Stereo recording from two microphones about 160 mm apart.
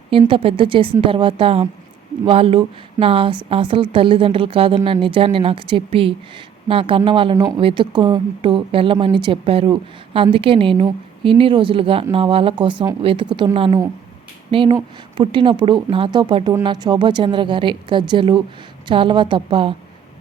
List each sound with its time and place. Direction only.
0.1 s a woman's voice: 35° right (ahead or behind)